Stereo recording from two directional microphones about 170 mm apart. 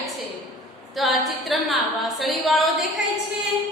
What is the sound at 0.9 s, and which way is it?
A woman's voice, centre (ahead or behind).